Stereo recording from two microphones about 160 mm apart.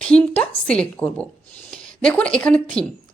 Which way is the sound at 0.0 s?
5° left (ahead or behind).